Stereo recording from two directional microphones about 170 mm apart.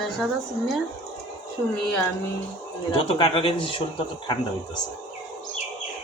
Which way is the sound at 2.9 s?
35° left (ahead or behind).